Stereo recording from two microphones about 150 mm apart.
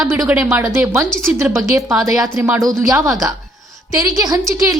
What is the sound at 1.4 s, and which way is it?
A woman's voice, 15° right (ahead or behind).